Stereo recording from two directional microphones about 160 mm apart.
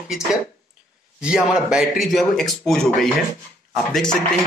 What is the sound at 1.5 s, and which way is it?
Speech, centre (ahead or behind).